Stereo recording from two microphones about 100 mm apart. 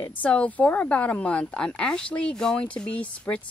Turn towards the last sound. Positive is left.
turn(degrees=10)  # may be behind; listen again after turning